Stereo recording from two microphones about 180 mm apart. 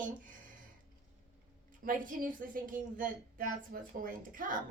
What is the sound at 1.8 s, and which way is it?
A woman's voice, 50° right (ahead or behind).